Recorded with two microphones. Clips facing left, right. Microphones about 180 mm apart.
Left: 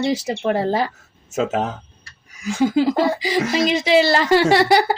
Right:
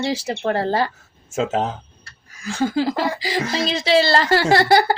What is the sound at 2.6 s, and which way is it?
Speech, 20° left (ahead or behind).